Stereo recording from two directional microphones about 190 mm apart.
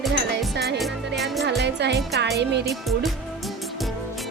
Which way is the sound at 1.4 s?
60° right (ahead or behind).